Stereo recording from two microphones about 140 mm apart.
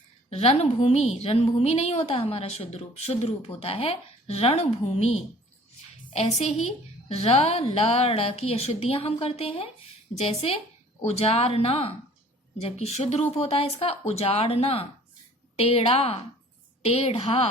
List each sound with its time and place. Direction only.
0.3 s a woman's voice: 50° left (ahead or behind)
6.1 s a woman's voice: 50° left (ahead or behind)